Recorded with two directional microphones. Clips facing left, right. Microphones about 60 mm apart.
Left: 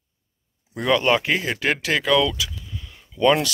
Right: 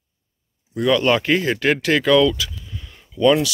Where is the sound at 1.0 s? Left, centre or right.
Centre.